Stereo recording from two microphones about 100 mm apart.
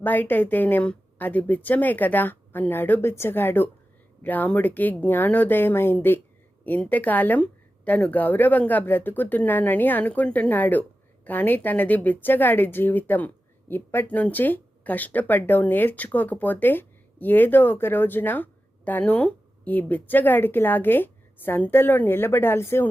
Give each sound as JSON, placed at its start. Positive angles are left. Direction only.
{"t": 0.0, "sound": "a woman's voice", "side_deg": 20}